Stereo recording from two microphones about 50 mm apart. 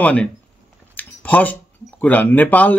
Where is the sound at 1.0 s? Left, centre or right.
Left.